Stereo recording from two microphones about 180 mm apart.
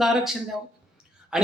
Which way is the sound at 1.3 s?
5° right (ahead or behind).